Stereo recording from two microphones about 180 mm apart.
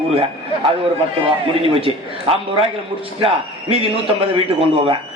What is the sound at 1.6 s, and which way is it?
A man's voice, 30° right (ahead or behind).